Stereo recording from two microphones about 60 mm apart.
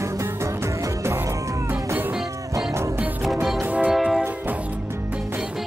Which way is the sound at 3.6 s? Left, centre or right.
Right.